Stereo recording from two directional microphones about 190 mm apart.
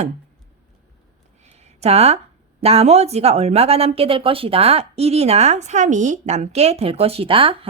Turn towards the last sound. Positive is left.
turn(degrees=-30)  # may be behind; listen again after turning